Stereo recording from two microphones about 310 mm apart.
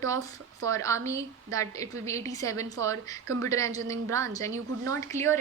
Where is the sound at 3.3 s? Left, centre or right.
Right.